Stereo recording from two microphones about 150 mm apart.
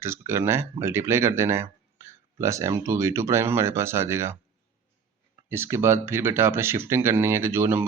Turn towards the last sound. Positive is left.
turn(degrees=-15)  # may be behind; listen again after turning